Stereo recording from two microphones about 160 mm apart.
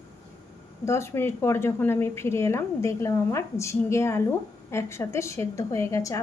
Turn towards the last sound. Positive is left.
turn(degrees=20)  # may be behind; listen again after turning